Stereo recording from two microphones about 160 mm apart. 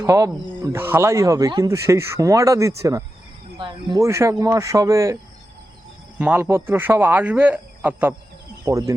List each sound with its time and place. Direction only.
0.0 s speech: 20° right (ahead or behind)
6.1 s speech: 10° right (ahead or behind)